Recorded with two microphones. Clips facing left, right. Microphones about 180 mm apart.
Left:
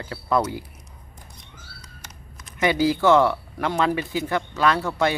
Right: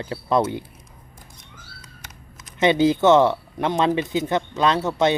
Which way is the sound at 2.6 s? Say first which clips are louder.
Right 3 dB; 25° right (ahead or behind).